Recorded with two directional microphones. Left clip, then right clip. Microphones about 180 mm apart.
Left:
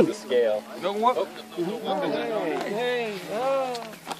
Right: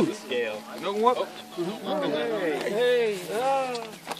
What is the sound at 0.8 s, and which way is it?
Speech, 50° left (ahead or behind).